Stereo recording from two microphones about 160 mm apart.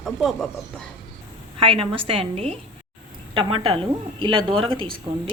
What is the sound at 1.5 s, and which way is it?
A woman's voice, 35° right (ahead or behind).